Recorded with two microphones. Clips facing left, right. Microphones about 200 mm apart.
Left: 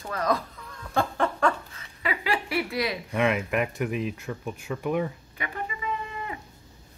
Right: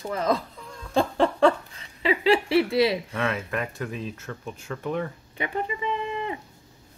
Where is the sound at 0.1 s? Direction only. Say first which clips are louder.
Right 2 dB; 25° right (ahead or behind).